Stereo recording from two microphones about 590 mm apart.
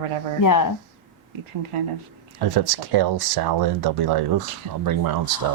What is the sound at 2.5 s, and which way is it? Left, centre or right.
Speech, right.